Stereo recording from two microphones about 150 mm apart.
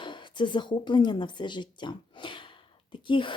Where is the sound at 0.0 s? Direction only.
30° left (ahead or behind).